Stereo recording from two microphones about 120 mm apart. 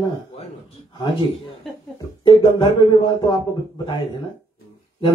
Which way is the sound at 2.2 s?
40° left (ahead or behind).